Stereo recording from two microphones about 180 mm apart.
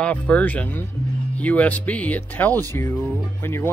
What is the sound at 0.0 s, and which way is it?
Speech, 10° left (ahead or behind).